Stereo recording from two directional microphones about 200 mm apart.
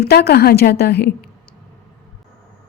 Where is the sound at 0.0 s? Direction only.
55° left (ahead or behind).